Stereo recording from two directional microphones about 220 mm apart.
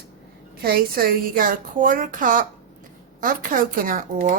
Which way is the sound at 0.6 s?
45° right (ahead or behind).